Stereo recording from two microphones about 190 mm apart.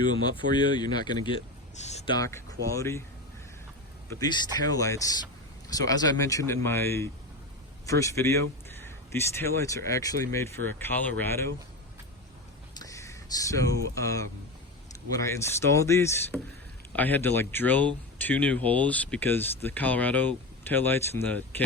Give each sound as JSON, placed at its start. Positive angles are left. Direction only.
{"t": 0.0, "sound": "speech", "side_deg": 25}
{"t": 1.7, "sound": "a sound", "side_deg": 35}
{"t": 2.1, "sound": "speech", "side_deg": 20}
{"t": 4.1, "sound": "speech", "side_deg": 20}
{"t": 12.7, "sound": "speech", "side_deg": 20}